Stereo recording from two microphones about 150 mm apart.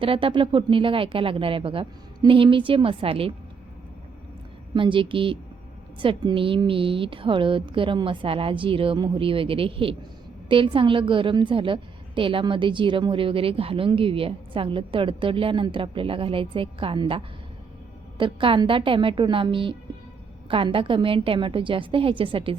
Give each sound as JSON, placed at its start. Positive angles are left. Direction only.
{"t": 0.0, "sound": "a woman's voice", "side_deg": -35}
{"t": 4.7, "sound": "a woman's voice", "side_deg": -35}